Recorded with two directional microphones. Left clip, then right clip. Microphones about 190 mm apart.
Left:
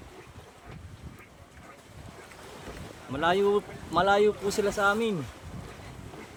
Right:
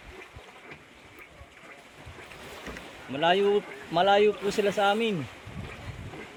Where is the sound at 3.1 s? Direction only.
10° left (ahead or behind).